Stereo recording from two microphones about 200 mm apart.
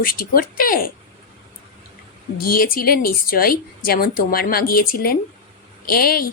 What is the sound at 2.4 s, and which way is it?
A woman's voice, 45° left (ahead or behind).